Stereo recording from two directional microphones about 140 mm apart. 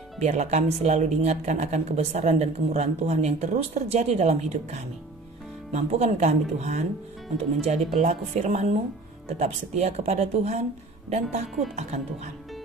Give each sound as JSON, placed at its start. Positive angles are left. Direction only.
{"t": 0.2, "sound": "speech", "side_deg": -50}